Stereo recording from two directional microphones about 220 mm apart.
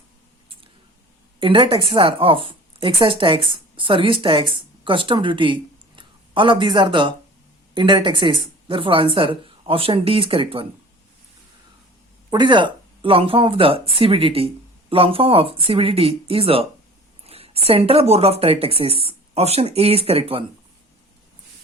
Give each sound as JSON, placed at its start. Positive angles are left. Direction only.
{"t": 1.4, "sound": "speech", "side_deg": -25}
{"t": 12.3, "sound": "speech", "side_deg": -20}